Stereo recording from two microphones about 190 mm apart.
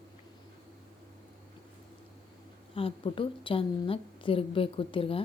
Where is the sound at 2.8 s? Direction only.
30° left (ahead or behind).